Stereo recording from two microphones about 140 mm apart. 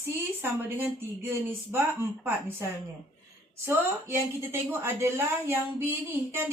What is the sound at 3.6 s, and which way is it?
A woman's voice, 15° right (ahead or behind).